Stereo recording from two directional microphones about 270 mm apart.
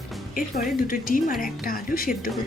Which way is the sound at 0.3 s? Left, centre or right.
Left.